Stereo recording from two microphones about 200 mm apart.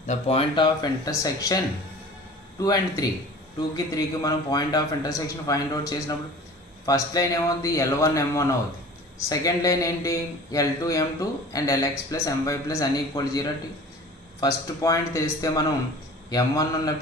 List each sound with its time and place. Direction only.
0.0 s a man's voice: 35° left (ahead or behind); by 1.6 s 20° left (ahead or behind)
2.6 s a man's voice: 20° left (ahead or behind)